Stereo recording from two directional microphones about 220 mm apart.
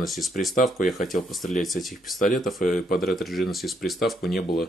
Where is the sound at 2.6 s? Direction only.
35° left (ahead or behind).